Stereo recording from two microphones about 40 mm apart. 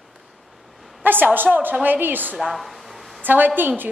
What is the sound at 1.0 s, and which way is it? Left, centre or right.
A woman's voice, right.